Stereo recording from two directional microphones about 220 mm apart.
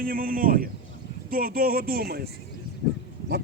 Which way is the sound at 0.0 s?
40° right (ahead or behind).